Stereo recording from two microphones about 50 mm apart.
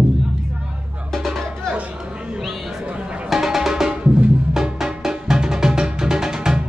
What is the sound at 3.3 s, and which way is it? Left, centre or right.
Music, centre.